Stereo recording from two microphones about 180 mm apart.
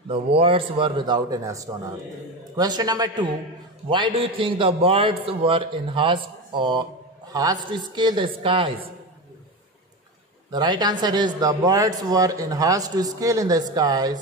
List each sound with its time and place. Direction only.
0.1 s speech: 30° right (ahead or behind)
10.5 s speech: 20° right (ahead or behind)